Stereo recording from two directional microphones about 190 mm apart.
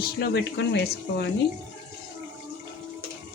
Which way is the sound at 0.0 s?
60° left (ahead or behind).